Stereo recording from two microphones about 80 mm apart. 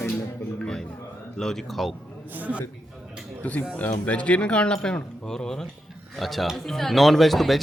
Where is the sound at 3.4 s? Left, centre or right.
Centre.